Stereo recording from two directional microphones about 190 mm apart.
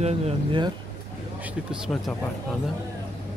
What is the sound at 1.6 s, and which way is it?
Speech, centre (ahead or behind).